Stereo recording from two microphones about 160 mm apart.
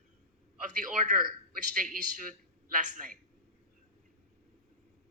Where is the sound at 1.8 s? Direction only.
55° right (ahead or behind).